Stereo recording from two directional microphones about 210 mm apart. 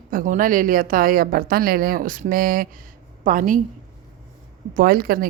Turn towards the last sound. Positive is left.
turn(degrees=-45)  # may be behind; listen again after turning